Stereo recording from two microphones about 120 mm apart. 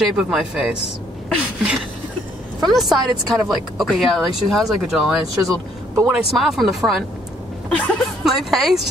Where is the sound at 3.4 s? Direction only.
Centre (ahead or behind).